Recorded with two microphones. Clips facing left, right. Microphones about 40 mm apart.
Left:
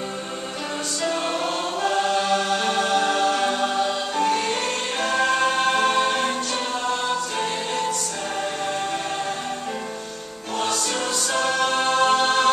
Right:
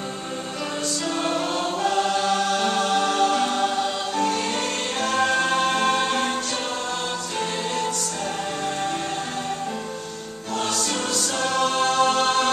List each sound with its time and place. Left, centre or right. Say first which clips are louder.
1.0 s choir: left 2 dB; centre
5.3 s music: left 1 dB; centre
5.6 s music: left 1 dB; centre
5.9 s music: left 2 dB; centre
11.3 s a capella: left 1 dB; left